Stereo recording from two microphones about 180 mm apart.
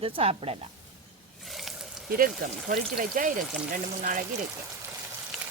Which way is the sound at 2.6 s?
50° right (ahead or behind).